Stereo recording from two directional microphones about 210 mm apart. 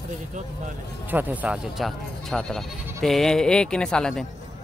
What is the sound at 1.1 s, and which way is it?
Speech, 10° right (ahead or behind).